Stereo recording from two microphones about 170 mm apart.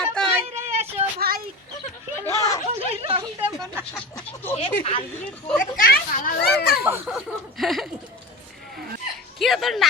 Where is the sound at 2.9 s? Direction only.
35° right (ahead or behind).